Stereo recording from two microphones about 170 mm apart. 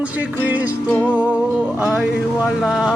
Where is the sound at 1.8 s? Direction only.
5° right (ahead or behind).